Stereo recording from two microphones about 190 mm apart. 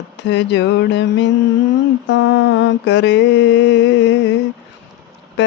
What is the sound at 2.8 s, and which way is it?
Speech, 70° left (ahead or behind).